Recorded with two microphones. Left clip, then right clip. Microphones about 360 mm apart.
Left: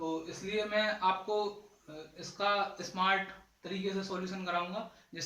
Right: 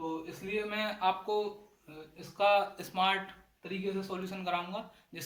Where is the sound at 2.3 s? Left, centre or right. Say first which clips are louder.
Right 4 dB; centre.